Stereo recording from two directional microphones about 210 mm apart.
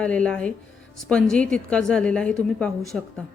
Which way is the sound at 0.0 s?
5° left (ahead or behind).